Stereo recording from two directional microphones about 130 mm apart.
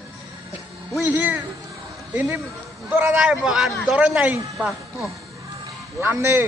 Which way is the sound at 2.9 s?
5° right (ahead or behind).